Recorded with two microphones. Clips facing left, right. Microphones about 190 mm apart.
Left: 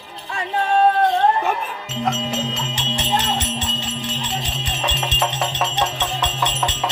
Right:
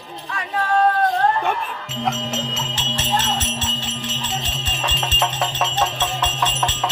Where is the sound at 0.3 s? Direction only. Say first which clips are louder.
Left 2 dB; 25° left (ahead or behind).